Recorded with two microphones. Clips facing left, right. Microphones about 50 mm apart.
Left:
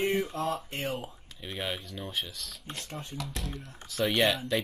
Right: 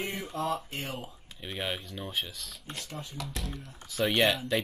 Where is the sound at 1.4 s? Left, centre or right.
Centre.